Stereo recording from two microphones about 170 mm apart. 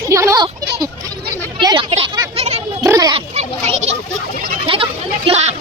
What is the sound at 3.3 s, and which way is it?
Children playing, 40° right (ahead or behind).